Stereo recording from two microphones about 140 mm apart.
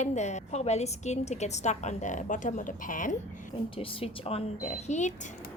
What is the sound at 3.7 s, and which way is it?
Speech, 40° left (ahead or behind).